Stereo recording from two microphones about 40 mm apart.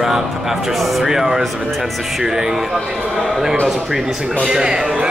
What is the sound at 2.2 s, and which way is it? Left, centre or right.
Speech, centre.